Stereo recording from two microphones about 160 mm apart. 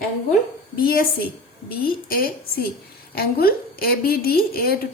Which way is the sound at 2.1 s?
70° left (ahead or behind).